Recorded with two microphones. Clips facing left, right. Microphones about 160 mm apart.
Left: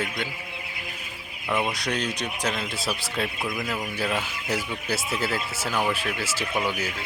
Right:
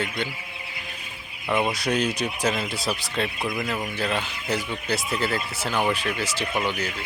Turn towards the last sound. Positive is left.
turn(degrees=5)  # may be behind; listen again after turning